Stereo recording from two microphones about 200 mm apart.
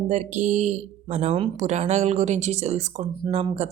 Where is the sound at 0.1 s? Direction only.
40° right (ahead or behind).